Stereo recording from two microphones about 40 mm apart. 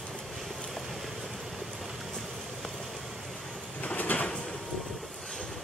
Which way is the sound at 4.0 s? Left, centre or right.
Left.